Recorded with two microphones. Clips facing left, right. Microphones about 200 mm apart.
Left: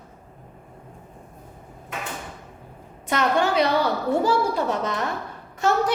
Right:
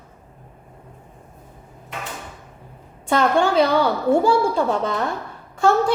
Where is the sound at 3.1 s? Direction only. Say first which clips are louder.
Right 4 dB; 30° right (ahead or behind).